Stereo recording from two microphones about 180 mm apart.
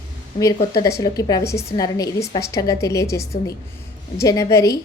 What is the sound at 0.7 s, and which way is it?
A woman's voice, 20° left (ahead or behind).